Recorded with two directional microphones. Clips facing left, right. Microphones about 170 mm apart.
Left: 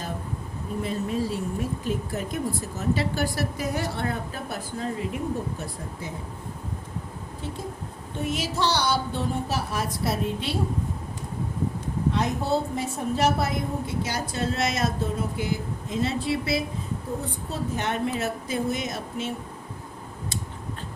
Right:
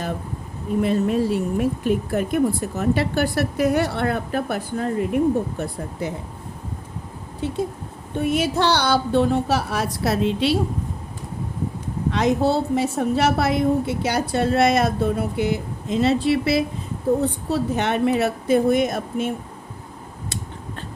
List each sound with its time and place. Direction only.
0.8 s speech: 70° right (ahead or behind)
8.2 s a woman's voice: 60° right (ahead or behind); by 10.6 s 90° right
12.1 s a woman's voice: 90° right; by 18.1 s 75° right (ahead or behind)
18.2 s speech: 60° right (ahead or behind)